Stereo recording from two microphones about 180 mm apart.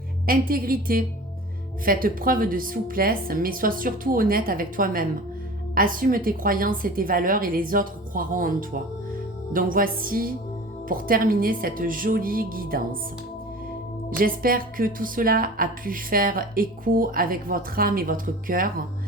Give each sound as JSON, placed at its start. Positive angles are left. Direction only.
{"t": 0.3, "sound": "a woman's voice", "side_deg": -55}
{"t": 14.2, "sound": "a woman's voice", "side_deg": -50}